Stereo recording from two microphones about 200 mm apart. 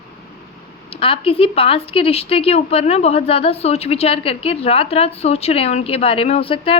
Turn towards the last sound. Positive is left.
turn(degrees=25)  # may be behind; listen again after turning